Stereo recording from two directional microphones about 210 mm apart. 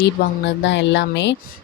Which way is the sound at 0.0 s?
55° left (ahead or behind).